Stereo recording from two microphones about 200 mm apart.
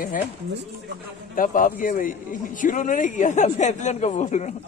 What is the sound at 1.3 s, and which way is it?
A man's voice, 45° left (ahead or behind).